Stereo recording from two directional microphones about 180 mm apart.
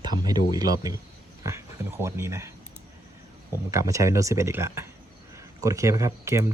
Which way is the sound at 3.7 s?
15° right (ahead or behind).